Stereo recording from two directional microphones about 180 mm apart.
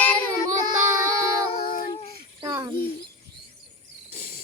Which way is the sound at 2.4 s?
25° right (ahead or behind).